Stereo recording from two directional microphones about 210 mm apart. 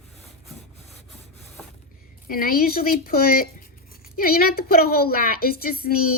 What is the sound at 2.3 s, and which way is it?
A woman's voice, 45° left (ahead or behind).